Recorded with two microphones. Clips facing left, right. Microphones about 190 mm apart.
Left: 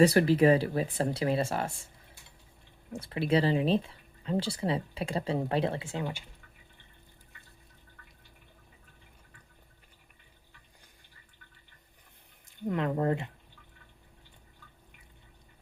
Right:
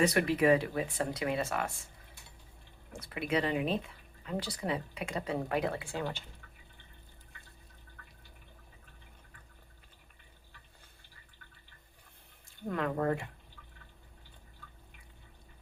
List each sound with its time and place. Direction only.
0.0 s speech: 30° left (ahead or behind)
3.0 s speech: 30° left (ahead or behind)
12.5 s speech: 20° left (ahead or behind)